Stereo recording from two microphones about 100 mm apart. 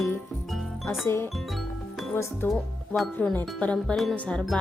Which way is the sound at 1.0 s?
25° left (ahead or behind).